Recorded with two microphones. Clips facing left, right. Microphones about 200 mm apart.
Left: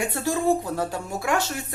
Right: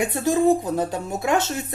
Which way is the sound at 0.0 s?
20° right (ahead or behind).